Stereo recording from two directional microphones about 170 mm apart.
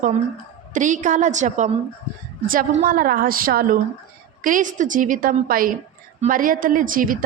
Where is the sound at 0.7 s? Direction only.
45° right (ahead or behind).